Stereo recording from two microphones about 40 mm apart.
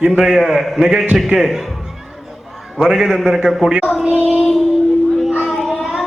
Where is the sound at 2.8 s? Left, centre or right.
Centre.